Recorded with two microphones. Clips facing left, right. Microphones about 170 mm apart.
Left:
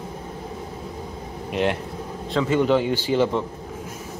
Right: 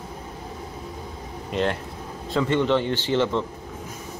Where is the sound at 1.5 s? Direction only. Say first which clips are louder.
Left 2 dB; 10° left (ahead or behind).